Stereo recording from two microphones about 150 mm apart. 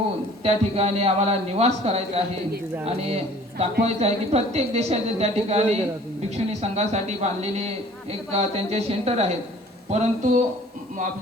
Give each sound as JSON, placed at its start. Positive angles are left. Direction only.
{"t": 0.4, "sound": "speech", "side_deg": -45}